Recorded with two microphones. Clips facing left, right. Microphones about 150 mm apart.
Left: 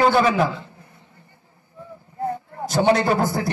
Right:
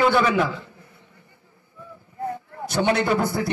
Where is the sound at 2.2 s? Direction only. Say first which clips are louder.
Left 3 dB; 40° left (ahead or behind).